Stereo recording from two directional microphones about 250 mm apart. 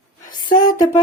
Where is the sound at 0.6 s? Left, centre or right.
Centre.